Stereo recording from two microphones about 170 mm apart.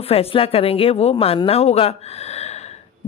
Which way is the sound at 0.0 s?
35° left (ahead or behind).